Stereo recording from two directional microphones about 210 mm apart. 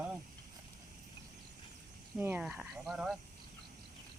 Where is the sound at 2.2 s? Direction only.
10° right (ahead or behind).